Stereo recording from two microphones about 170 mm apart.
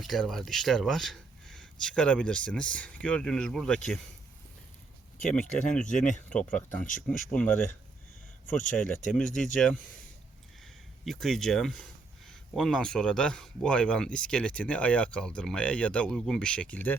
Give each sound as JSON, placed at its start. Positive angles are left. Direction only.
{"t": 0.0, "sound": "speech", "side_deg": 0}
{"t": 5.1, "sound": "speech", "side_deg": 5}
{"t": 6.8, "sound": "speech", "side_deg": 50}
{"t": 7.3, "sound": "speech", "side_deg": 10}
{"t": 8.5, "sound": "speech", "side_deg": 50}
{"t": 9.0, "sound": "speech", "side_deg": 5}
{"t": 11.0, "sound": "speech", "side_deg": 0}